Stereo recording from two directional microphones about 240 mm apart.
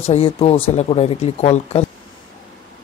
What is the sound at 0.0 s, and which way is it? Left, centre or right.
Speech, left.